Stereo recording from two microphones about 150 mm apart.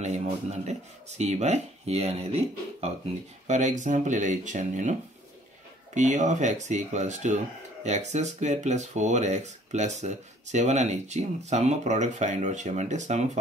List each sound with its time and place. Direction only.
0.0 s speech: 50° right (ahead or behind)
5.9 s speech: 55° right (ahead or behind)